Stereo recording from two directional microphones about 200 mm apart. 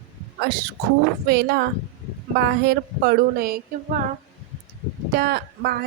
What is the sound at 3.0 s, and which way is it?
A woman's voice, 50° right (ahead or behind).